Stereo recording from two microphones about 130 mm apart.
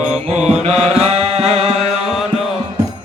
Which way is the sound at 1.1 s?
55° right (ahead or behind).